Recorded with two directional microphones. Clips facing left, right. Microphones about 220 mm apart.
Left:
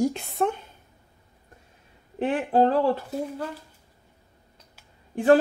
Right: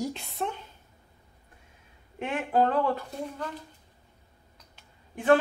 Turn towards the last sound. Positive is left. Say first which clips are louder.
# left 4 dB
turn(degrees=35)  # may be behind; listen again after turning